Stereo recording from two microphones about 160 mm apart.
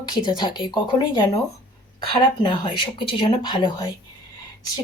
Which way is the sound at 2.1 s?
30° left (ahead or behind).